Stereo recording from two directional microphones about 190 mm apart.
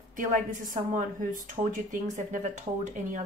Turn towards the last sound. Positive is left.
turn(degrees=-40)  # may be behind; listen again after turning